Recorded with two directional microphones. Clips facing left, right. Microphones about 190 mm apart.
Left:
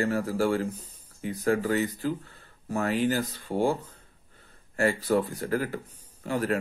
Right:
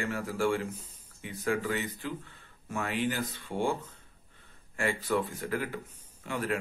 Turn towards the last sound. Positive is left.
turn(degrees=40)  # may be behind; listen again after turning